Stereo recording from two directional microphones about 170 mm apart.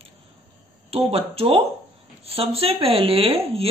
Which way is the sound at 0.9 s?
35° right (ahead or behind).